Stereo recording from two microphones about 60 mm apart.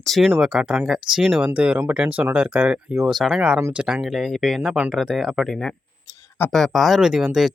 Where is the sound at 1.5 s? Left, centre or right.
Right.